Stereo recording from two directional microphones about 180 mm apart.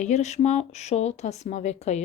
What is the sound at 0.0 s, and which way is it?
Speech, 40° left (ahead or behind).